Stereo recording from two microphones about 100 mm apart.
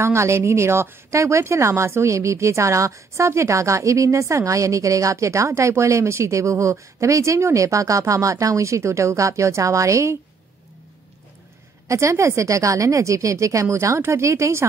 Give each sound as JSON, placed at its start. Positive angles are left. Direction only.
{"t": 0.0, "sound": "speech", "side_deg": -30}
{"t": 11.9, "sound": "speech", "side_deg": -30}